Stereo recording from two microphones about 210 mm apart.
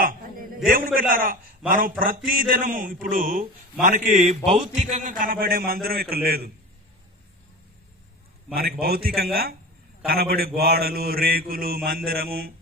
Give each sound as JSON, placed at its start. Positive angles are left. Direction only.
{"t": 0.0, "sound": "a sound", "side_deg": -40}
{"t": 0.7, "sound": "a man's voice", "side_deg": -45}
{"t": 8.5, "sound": "a man's voice", "side_deg": -45}